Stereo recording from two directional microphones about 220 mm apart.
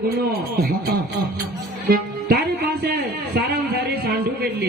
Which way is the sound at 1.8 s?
45° right (ahead or behind).